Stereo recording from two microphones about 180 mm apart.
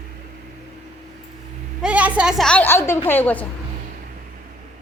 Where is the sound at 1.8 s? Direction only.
5° right (ahead or behind); by 3.4 s 10° left (ahead or behind).